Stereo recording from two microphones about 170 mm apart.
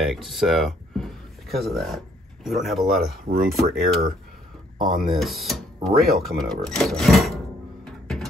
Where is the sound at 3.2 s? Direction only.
60° right (ahead or behind).